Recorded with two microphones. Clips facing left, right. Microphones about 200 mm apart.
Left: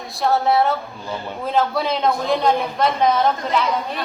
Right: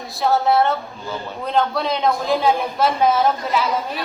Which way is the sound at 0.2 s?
Centre (ahead or behind).